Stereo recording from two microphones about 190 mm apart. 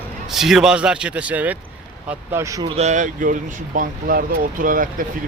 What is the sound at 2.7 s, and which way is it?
Speech, 40° right (ahead or behind).